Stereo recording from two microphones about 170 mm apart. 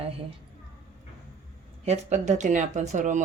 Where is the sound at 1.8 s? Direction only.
40° right (ahead or behind).